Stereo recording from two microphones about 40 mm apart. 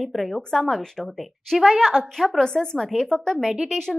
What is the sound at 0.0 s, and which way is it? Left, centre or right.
A woman's voice, centre.